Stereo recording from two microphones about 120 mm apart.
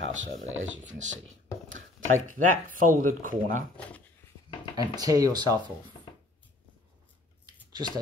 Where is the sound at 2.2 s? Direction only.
90° right.